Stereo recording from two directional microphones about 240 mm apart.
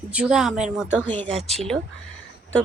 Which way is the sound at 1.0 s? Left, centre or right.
Centre.